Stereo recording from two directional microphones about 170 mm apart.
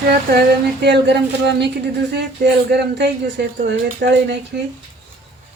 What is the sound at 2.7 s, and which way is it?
Speech, 85° right.